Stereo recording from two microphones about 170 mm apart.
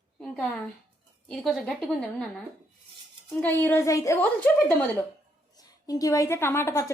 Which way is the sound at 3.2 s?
10° left (ahead or behind).